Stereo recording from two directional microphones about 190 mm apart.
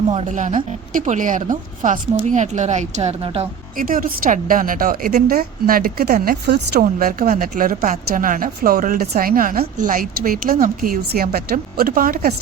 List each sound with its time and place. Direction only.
0.1 s speech: 35° right (ahead or behind)
3.8 s a woman's voice: 45° right (ahead or behind)